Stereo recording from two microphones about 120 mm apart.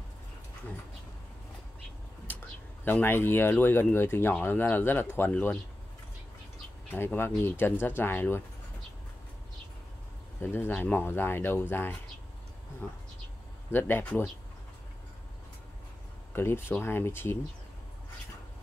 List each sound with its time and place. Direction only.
2.8 s speech: 15° left (ahead or behind)
6.9 s speech: 20° left (ahead or behind)
10.4 s speech: 15° left (ahead or behind)
16.3 s speech: 20° left (ahead or behind)